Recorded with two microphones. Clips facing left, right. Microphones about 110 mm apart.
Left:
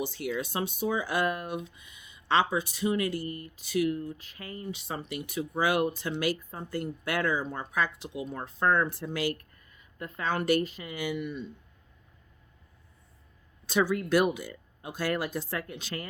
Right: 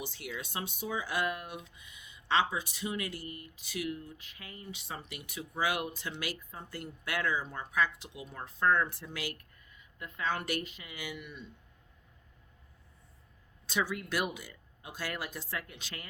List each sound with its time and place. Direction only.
0.0 s speech: 40° left (ahead or behind)
13.7 s speech: 40° left (ahead or behind)